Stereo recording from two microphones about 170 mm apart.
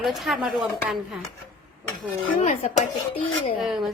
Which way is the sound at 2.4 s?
35° left (ahead or behind).